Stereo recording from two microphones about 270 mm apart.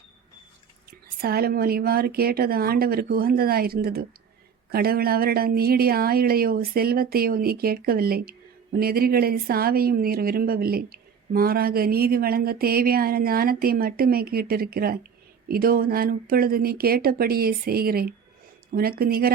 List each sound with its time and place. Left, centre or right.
0.9 s a woman's voice: right